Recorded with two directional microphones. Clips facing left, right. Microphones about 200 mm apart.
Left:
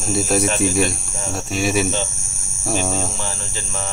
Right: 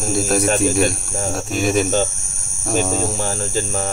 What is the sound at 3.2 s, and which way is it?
Speech, 45° right (ahead or behind).